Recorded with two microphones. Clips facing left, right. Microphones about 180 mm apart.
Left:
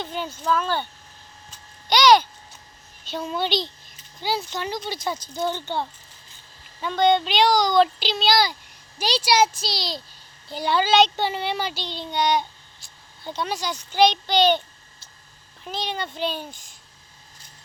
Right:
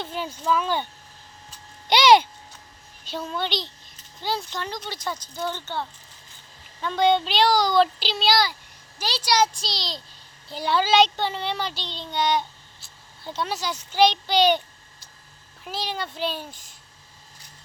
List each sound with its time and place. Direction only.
0.0 s speech: 5° right (ahead or behind)
1.9 s speech: 25° right (ahead or behind)
3.2 s speech: 10° left (ahead or behind)
6.9 s speech: 5° right (ahead or behind)
9.0 s speech: 15° left (ahead or behind); by 11.1 s 10° right (ahead or behind)
11.2 s a child's voice: 10° left (ahead or behind); by 14.6 s 10° right (ahead or behind)
15.6 s speech: 5° right (ahead or behind)